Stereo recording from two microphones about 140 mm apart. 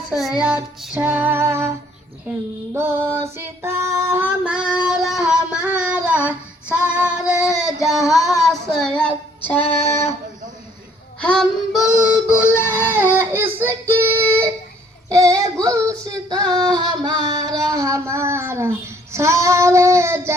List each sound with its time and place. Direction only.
0.2 s child singing: 5° right (ahead or behind)
2.7 s child singing: 15° right (ahead or behind); by 8.2 s centre (ahead or behind)
8.8 s a woman's voice: 5° left (ahead or behind)
9.6 s a sound: 45° left (ahead or behind)
9.9 s a sound: 20° left (ahead or behind)
11.2 s music: 5° left (ahead or behind)
12.1 s child singing: 10° right (ahead or behind)
12.7 s baby cry: 15° right (ahead or behind)
13.1 s child singing: 15° right (ahead or behind)
15.6 s female singing: 25° right (ahead or behind)